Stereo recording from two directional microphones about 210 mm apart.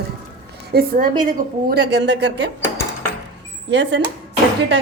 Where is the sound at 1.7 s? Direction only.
55° right (ahead or behind).